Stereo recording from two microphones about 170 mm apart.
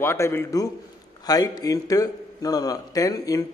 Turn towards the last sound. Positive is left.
turn(degrees=20)  # may be behind; listen again after turning